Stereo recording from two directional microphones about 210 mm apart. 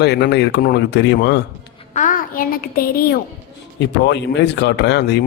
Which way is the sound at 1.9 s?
40° left (ahead or behind).